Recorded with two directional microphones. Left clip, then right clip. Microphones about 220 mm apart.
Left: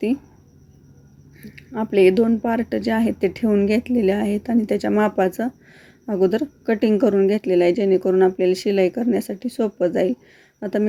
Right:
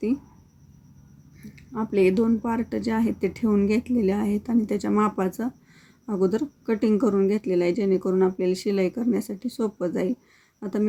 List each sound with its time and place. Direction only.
1.4 s speech: centre (ahead or behind)